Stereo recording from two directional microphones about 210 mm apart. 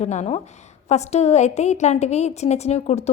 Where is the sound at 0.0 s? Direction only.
35° left (ahead or behind).